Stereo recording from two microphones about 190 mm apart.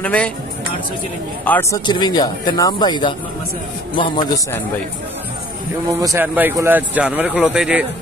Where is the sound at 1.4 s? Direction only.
10° left (ahead or behind).